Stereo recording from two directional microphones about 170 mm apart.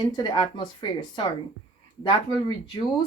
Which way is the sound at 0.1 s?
25° left (ahead or behind).